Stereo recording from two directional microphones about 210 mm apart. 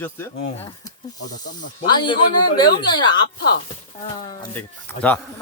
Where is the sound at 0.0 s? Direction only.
10° left (ahead or behind).